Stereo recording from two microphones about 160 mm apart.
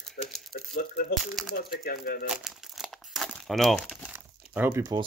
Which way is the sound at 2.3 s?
Centre (ahead or behind).